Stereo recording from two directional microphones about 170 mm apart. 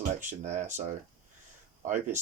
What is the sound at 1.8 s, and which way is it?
Speech, 45° right (ahead or behind).